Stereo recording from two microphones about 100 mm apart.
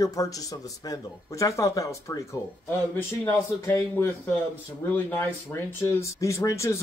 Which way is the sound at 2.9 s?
20° left (ahead or behind).